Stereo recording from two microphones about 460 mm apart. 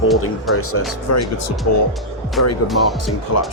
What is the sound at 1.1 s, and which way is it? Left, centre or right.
Speech, left.